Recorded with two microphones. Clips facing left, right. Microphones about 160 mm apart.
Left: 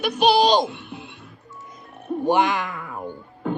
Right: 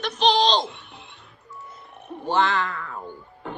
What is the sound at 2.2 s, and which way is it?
Music, 15° left (ahead or behind).